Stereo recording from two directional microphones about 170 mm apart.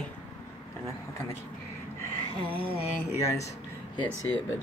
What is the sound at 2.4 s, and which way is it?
Music, 30° right (ahead or behind).